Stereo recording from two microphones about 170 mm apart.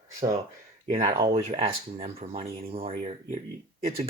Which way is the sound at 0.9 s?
30° right (ahead or behind).